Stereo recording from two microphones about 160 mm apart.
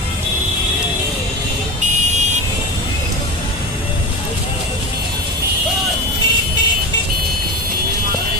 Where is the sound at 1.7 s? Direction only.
50° right (ahead or behind).